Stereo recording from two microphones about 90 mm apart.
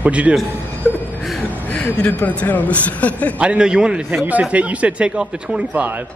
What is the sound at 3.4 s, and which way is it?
Speech, 10° right (ahead or behind).